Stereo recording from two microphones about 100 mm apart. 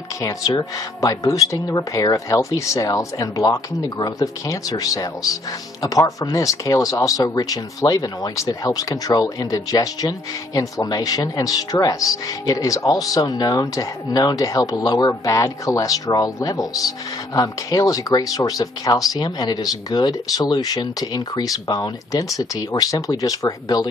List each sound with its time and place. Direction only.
0.2 s speech: 35° left (ahead or behind)